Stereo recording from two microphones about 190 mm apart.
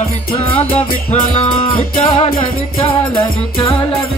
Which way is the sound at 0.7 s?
25° left (ahead or behind).